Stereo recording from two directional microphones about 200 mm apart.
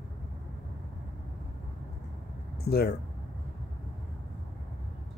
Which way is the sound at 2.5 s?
50° left (ahead or behind).